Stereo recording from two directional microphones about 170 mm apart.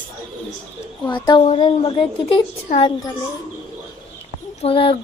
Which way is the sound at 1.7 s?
30° left (ahead or behind).